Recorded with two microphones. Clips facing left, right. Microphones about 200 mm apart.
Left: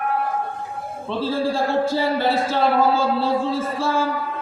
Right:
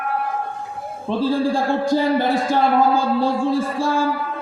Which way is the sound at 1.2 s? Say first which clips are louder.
Right 2 dB; 15° right (ahead or behind).